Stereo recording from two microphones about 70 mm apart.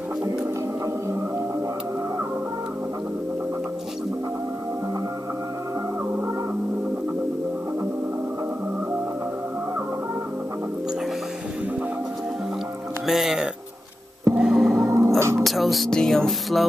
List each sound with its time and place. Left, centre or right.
13.0 s music: centre
14.3 s gong: centre
14.9 s whispering: right
15.4 s music: centre